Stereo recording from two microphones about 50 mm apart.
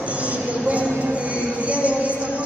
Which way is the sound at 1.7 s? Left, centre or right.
Right.